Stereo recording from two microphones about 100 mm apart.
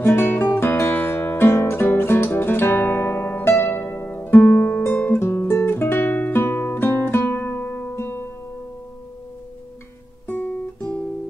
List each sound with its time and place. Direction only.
0.0 s music: 20° left (ahead or behind)
10.2 s guitar: 15° left (ahead or behind)